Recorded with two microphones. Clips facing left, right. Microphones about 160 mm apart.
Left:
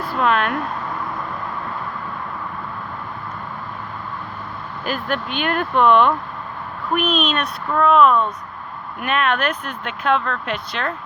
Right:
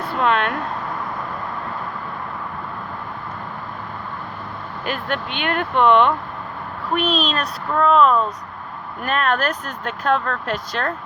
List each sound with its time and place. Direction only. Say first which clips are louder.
0.0 s speech: even; 25° right (ahead or behind)
4.9 s speech: left 1 dB; 25° right (ahead or behind)
6.9 s speech: left 1 dB; 30° right (ahead or behind)